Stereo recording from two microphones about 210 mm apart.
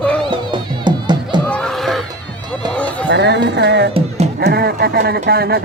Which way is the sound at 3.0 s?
55° right (ahead or behind).